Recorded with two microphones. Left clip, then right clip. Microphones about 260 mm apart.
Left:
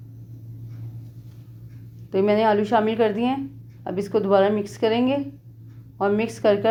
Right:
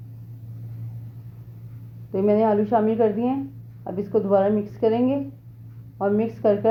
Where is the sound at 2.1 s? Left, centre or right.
Left.